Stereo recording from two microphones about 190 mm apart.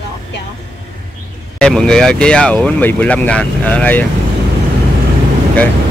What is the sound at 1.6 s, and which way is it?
Speech, 5° left (ahead or behind).